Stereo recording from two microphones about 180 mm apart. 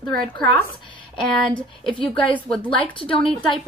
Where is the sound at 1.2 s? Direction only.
5° left (ahead or behind).